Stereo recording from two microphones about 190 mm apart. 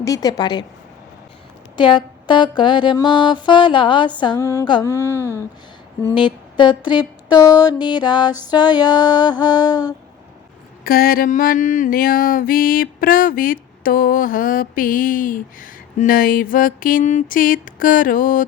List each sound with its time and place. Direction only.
0.0 s music: 20° left (ahead or behind)
1.7 s music: 25° left (ahead or behind)
6.1 s music: 25° left (ahead or behind)
10.8 s a sound: 50° left (ahead or behind)